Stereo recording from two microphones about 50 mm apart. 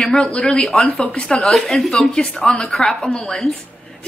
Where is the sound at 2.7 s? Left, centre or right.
Centre.